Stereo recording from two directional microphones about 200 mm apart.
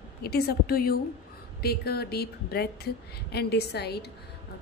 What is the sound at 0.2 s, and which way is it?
A woman's voice, 50° left (ahead or behind).